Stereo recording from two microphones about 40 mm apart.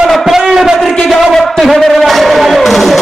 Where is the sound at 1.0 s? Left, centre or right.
Centre.